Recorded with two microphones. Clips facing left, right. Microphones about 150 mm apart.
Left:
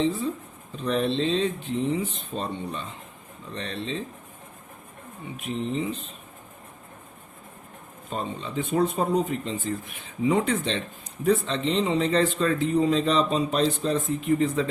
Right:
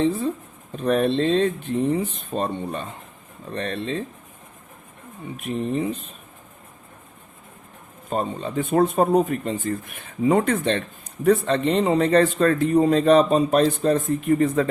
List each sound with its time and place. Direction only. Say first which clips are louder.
0.7 s speech: right 5 dB; 55° right (ahead or behind)
5.5 s speech: right 4 dB; 55° right (ahead or behind)
8.1 s speech: right 5 dB; 45° right (ahead or behind)